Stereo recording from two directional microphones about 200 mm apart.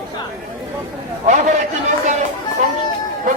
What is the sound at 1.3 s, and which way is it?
Speech, 35° right (ahead or behind).